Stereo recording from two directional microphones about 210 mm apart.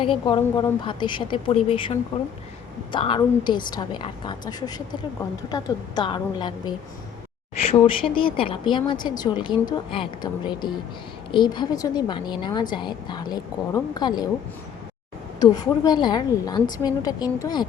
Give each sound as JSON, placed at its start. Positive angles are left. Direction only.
{"t": 0.0, "sound": "speech", "side_deg": 25}
{"t": 15.4, "sound": "speech", "side_deg": 20}